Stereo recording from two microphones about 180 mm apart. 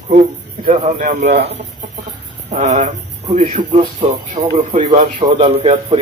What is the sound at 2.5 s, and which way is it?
Speech, 40° right (ahead or behind).